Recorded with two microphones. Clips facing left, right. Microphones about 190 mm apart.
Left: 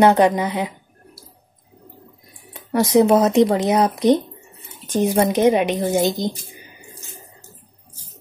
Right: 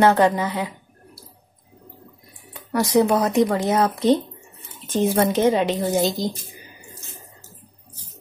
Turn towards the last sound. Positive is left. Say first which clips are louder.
# left 2 dB
turn(degrees=20)  # may be behind; listen again after turning